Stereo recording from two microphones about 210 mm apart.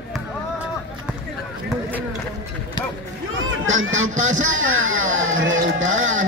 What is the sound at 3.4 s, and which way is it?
Speech, 65° right (ahead or behind).